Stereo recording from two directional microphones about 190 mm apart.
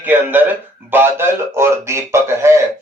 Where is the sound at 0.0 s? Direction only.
10° right (ahead or behind).